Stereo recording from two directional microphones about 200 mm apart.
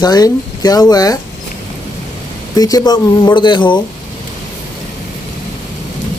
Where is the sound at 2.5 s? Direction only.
20° left (ahead or behind).